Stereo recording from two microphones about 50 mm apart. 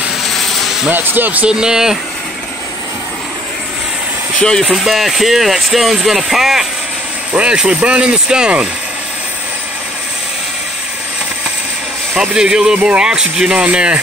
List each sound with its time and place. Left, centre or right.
0.2 s a sound: centre
0.8 s speech: right
1.5 s speech: centre
4.4 s speech: centre
4.6 s speech: centre
7.3 s speech: right
12.2 s speech: centre